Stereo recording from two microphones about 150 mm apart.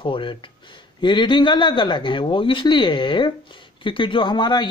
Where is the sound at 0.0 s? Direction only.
35° left (ahead or behind).